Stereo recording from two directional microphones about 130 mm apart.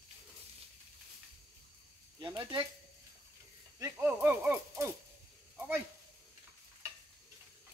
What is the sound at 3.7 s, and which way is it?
Snake, 20° right (ahead or behind).